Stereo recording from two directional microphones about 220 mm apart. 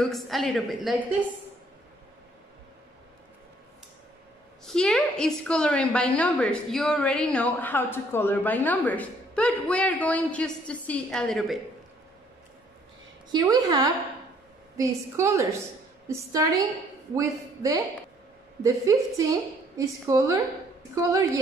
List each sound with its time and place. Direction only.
0.0 s a woman's voice: centre (ahead or behind)
4.6 s a woman's voice: 5° left (ahead or behind)
13.3 s a woman's voice: 15° right (ahead or behind)